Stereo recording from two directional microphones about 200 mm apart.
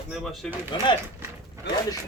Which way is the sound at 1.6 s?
60° left (ahead or behind).